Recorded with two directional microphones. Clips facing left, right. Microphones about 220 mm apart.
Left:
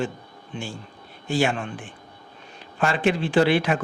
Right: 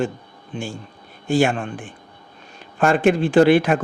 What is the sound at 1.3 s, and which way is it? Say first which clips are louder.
Speech: right 5 dB; 50° right (ahead or behind).